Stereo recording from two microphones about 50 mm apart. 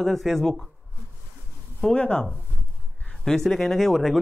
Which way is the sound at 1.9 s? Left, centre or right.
Centre.